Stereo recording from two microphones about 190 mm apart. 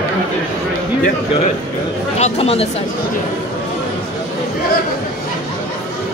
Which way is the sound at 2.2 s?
30° left (ahead or behind).